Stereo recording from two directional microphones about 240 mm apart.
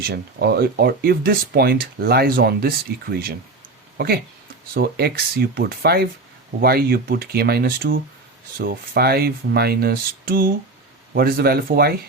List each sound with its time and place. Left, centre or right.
0.0 s speech: right